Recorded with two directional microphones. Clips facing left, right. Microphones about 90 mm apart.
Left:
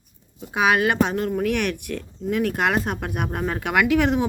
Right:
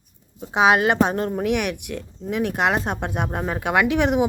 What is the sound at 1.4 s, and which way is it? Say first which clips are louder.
Speech: right 1 dB; 15° right (ahead or behind).